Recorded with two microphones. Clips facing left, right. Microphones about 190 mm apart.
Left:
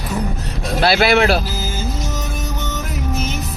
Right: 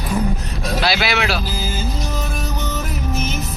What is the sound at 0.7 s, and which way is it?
Speech, 50° left (ahead or behind).